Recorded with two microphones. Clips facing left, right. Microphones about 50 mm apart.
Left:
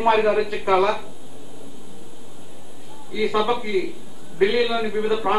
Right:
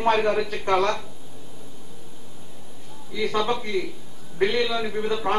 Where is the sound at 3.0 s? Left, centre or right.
Centre.